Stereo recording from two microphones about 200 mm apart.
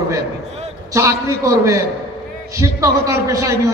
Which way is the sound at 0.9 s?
15° right (ahead or behind).